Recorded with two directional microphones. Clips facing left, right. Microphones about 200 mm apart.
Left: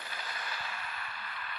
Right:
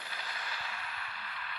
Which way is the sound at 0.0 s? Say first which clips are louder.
Left 2 dB; 45° left (ahead or behind).